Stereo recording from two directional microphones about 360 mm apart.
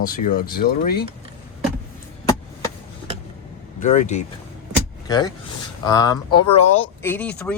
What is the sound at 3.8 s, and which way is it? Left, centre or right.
A man's voice, centre.